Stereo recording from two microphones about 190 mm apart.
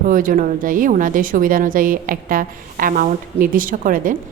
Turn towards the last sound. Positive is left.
turn(degrees=-45)  # may be behind; listen again after turning